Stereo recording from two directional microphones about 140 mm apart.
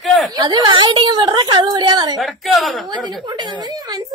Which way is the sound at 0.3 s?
25° right (ahead or behind).